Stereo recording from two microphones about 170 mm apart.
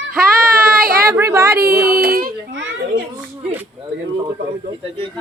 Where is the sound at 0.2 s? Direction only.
60° right (ahead or behind).